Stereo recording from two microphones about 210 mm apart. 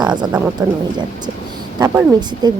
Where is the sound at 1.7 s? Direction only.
15° right (ahead or behind).